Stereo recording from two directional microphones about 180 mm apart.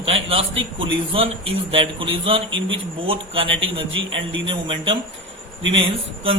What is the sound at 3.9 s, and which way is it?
Speech, 90° right.